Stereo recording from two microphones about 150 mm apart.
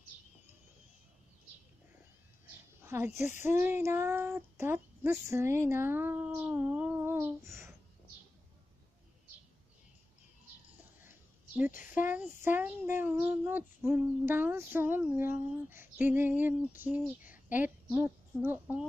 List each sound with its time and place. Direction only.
2.8 s speech: 15° right (ahead or behind)
11.1 s a sound: 10° right (ahead or behind)
11.9 s a woman's voice: 10° right (ahead or behind)